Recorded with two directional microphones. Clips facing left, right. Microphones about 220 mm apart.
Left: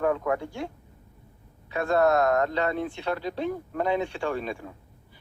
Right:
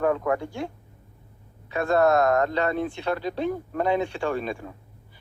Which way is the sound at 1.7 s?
50° right (ahead or behind).